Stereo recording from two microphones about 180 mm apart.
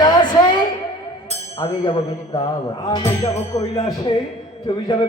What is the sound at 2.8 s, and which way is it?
A man's voice, 20° left (ahead or behind).